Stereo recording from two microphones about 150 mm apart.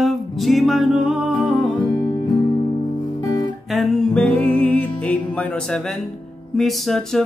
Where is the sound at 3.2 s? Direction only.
25° left (ahead or behind).